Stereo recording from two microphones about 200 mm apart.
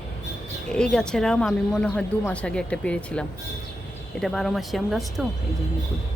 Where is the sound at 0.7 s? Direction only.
5° left (ahead or behind).